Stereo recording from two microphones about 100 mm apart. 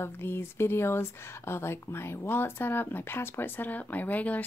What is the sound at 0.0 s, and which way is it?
Speech, 25° left (ahead or behind).